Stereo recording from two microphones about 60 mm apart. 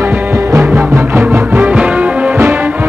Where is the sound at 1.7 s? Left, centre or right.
Right.